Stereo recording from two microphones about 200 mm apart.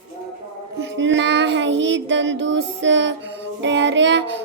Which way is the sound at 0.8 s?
65° right (ahead or behind).